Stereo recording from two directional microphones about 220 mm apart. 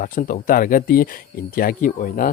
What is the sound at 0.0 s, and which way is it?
Speech, 35° left (ahead or behind).